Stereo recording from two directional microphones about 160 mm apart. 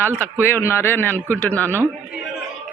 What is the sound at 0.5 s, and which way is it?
Speech, 15° left (ahead or behind).